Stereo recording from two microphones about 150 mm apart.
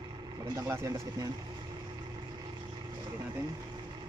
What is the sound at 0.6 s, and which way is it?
Speech, 20° right (ahead or behind).